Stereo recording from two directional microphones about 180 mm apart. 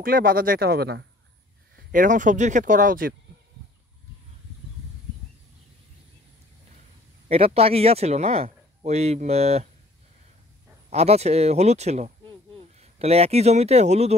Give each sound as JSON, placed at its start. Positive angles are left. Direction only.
{"t": 0.0, "sound": "speech", "side_deg": -55}
{"t": 1.9, "sound": "speech", "side_deg": -45}
{"t": 7.2, "sound": "speech", "side_deg": -35}
{"t": 10.9, "sound": "speech", "side_deg": -35}